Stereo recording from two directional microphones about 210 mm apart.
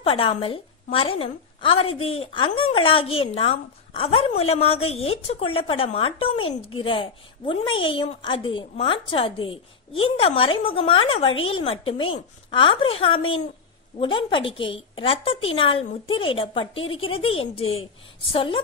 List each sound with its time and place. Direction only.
0.0 s a woman's voice: 25° left (ahead or behind)